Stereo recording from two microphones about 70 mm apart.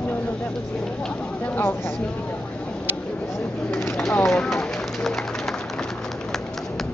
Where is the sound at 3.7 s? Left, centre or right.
Left.